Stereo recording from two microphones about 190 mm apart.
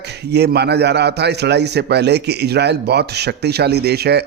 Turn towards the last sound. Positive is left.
turn(degrees=-60)  # may be behind; listen again after turning